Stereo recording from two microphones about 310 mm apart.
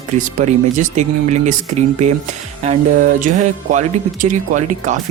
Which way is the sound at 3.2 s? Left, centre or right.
Right.